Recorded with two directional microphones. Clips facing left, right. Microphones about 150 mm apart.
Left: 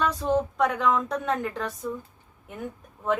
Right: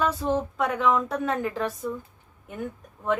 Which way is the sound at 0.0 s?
5° right (ahead or behind).